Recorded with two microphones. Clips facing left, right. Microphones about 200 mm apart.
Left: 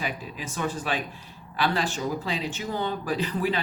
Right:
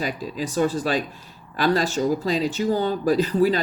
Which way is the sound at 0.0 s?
35° right (ahead or behind).